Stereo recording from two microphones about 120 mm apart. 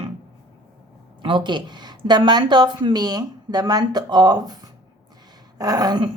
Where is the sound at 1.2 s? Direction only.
40° right (ahead or behind).